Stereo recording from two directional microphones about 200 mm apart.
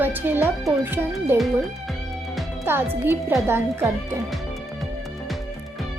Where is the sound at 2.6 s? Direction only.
10° right (ahead or behind).